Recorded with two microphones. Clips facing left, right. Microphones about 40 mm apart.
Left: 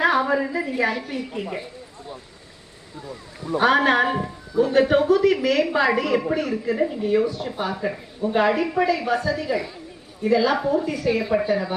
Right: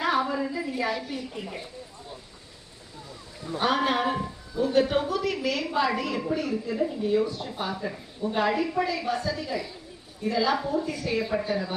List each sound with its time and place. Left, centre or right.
0.0 s a sound: left
0.9 s a man's voice: left
3.4 s a man's voice: left
6.5 s speech: left
6.8 s a woman's voice: left; by 10.5 s centre
10.5 s a woman's voice: left
10.8 s a woman's voice: centre